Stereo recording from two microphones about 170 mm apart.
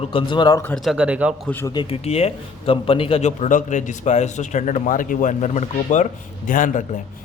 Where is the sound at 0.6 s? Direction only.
Centre (ahead or behind).